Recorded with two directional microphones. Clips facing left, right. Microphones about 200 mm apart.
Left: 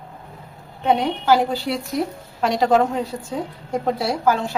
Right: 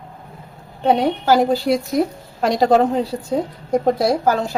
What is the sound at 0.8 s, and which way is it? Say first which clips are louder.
A woman's voice: right 3 dB; 35° right (ahead or behind).